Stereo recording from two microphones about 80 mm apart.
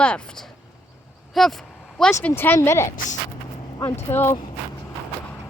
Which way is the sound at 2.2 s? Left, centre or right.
Left.